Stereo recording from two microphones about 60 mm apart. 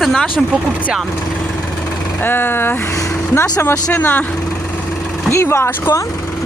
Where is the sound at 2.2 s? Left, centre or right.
Left.